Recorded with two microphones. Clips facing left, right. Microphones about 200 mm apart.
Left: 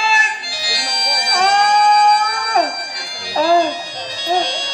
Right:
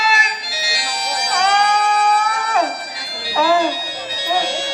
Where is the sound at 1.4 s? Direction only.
30° left (ahead or behind).